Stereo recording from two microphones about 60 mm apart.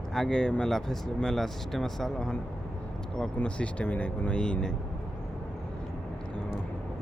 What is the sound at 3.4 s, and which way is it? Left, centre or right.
Speech, centre.